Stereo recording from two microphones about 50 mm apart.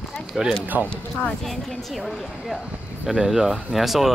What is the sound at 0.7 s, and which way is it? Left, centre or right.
Speech, right.